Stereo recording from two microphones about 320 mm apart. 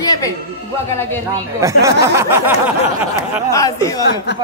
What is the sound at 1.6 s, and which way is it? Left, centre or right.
Speech, centre.